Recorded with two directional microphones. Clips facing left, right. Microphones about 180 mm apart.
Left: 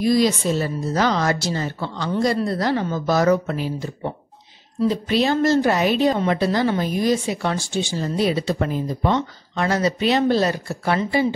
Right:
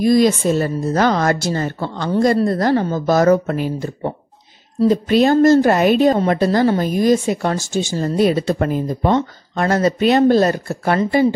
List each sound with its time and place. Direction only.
0.0 s a woman's voice: 50° right (ahead or behind)